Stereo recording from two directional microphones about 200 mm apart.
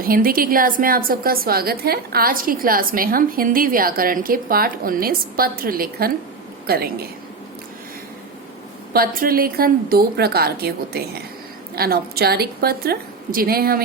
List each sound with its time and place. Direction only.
0.0 s a woman's voice: 45° right (ahead or behind)
8.9 s a woman's voice: 50° right (ahead or behind)